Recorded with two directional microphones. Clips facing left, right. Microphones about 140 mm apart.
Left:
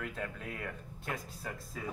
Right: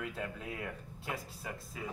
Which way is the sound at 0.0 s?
10° right (ahead or behind).